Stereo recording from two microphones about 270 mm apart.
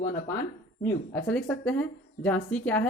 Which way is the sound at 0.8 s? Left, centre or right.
Centre.